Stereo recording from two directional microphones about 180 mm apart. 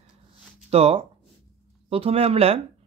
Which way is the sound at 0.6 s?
35° right (ahead or behind).